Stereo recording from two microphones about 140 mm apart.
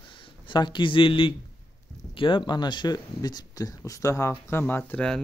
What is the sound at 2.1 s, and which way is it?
Speech, 35° left (ahead or behind).